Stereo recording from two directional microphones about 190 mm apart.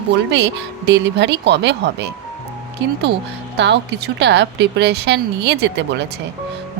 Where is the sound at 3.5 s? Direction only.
60° right (ahead or behind).